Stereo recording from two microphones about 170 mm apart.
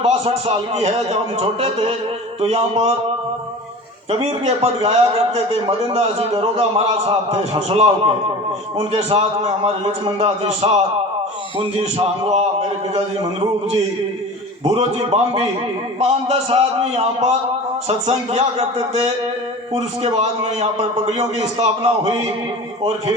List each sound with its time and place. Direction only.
0.0 s a man's voice: 35° right (ahead or behind)
4.1 s a man's voice: 35° right (ahead or behind)
14.7 s a man's voice: 35° right (ahead or behind)
19.7 s a man's voice: 40° right (ahead or behind)